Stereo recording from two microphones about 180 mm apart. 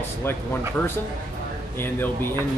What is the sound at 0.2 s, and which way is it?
Speech, 10° left (ahead or behind).